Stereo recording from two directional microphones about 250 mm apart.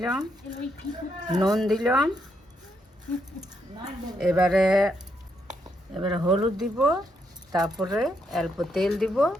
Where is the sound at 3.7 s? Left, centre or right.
Centre.